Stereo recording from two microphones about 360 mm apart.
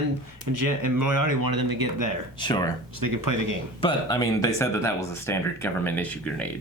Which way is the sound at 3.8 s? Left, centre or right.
Centre.